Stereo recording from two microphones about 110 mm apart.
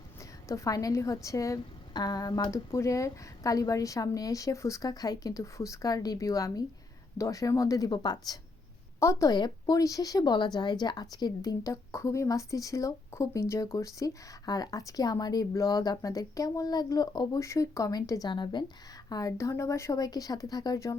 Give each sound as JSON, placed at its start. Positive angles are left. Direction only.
{"t": 0.4, "sound": "speech", "side_deg": 30}
{"t": 9.0, "sound": "a woman's voice", "side_deg": 25}
{"t": 9.3, "sound": "speech", "side_deg": 35}
{"t": 19.0, "sound": "speech", "side_deg": 30}